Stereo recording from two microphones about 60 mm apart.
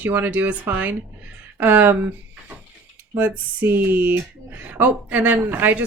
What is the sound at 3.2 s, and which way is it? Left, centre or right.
Speech, right.